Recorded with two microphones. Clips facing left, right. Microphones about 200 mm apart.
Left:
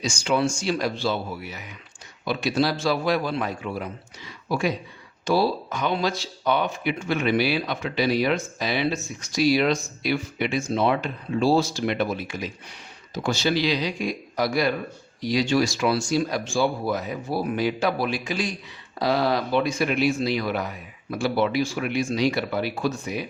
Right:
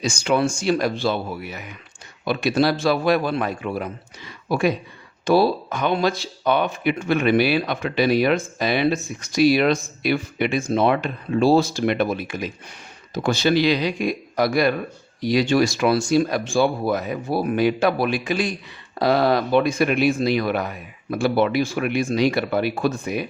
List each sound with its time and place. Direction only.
0.0 s speech: 55° right (ahead or behind)